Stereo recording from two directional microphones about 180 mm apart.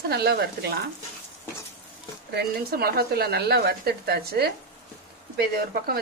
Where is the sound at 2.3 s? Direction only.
60° right (ahead or behind).